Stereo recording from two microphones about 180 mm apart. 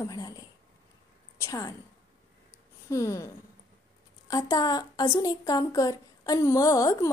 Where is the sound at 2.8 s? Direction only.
15° left (ahead or behind).